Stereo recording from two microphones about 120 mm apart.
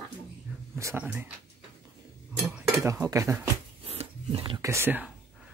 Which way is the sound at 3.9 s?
55° right (ahead or behind).